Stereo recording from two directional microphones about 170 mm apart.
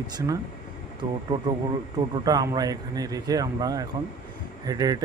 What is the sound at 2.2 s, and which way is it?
Speech, 20° right (ahead or behind).